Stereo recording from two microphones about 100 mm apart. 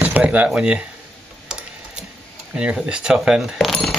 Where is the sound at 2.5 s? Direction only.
10° right (ahead or behind).